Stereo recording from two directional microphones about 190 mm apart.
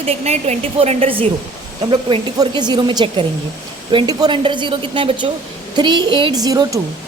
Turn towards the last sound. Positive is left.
turn(degrees=-20)  # may be behind; listen again after turning